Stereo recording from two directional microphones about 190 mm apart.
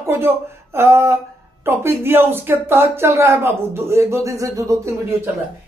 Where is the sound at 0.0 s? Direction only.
15° right (ahead or behind).